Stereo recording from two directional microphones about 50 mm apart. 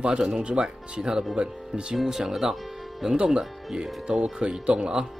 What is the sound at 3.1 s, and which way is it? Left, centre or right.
Speech, centre.